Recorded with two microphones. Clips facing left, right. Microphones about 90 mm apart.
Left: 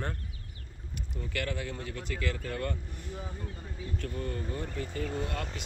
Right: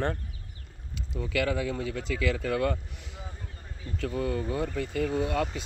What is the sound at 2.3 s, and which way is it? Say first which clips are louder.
Speech: right 7 dB; 90° right.